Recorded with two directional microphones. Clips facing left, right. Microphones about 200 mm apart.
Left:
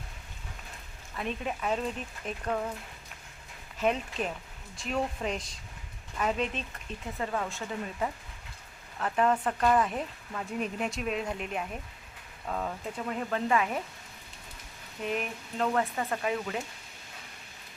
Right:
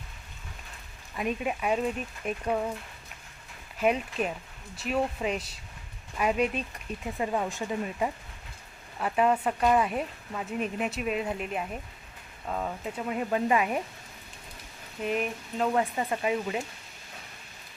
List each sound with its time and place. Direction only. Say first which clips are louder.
1.1 s speech: right 4 dB; 15° right (ahead or behind)
3.8 s speech: right 3 dB; 10° right (ahead or behind)
15.0 s speech: right 3 dB; centre (ahead or behind)